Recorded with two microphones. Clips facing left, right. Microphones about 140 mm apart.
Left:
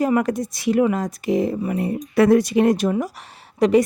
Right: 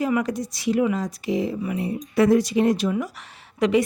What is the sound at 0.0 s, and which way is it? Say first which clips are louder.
Speech: left 4 dB; 50° left (ahead or behind).